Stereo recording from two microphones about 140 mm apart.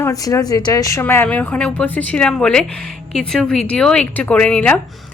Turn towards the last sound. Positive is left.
turn(degrees=10)  # may be behind; listen again after turning